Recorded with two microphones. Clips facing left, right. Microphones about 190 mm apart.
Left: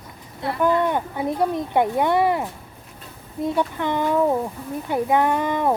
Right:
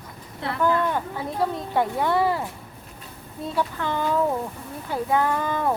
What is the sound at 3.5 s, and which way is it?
Speech, 20° left (ahead or behind).